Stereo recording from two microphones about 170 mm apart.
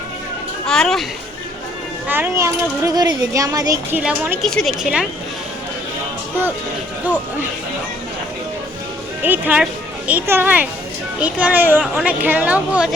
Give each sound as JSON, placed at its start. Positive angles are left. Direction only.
{"t": 0.7, "sound": "speech", "side_deg": 0}
{"t": 2.0, "sound": "a woman's voice", "side_deg": -10}
{"t": 4.4, "sound": "a woman's voice", "side_deg": 0}
{"t": 9.2, "sound": "a woman's voice", "side_deg": -10}